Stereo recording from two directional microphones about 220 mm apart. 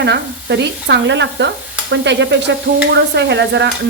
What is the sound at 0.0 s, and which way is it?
A woman's voice, 50° right (ahead or behind).